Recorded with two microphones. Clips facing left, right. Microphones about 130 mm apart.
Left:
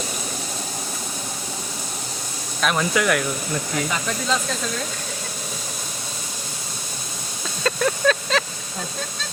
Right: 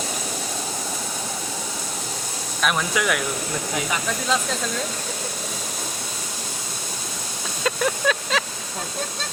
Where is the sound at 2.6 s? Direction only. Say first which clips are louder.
Left 2 dB; 5° right (ahead or behind).